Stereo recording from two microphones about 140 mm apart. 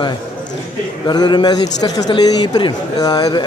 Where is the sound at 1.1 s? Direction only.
30° left (ahead or behind).